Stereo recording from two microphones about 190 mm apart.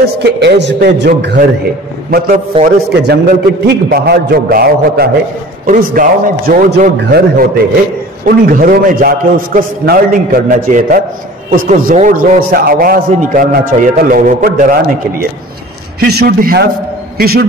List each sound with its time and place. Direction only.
0.0 s a man's voice: 60° right (ahead or behind)
2.0 s a man's voice: 50° right (ahead or behind)
16.0 s a man's voice: 55° right (ahead or behind)